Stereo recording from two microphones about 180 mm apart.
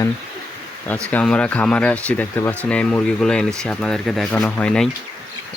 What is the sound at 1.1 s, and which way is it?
Speech, 5° left (ahead or behind).